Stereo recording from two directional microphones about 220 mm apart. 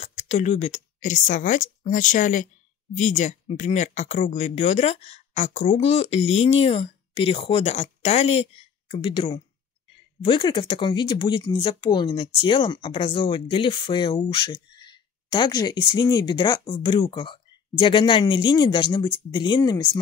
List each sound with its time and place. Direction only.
0.0 s a woman's voice: 30° left (ahead or behind)